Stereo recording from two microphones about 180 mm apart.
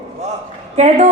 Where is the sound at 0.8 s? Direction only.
40° right (ahead or behind).